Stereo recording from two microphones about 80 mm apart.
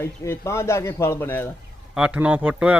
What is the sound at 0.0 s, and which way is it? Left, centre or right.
A man's voice, left.